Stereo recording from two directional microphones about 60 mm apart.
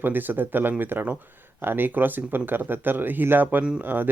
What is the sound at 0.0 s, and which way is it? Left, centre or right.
Speech, right.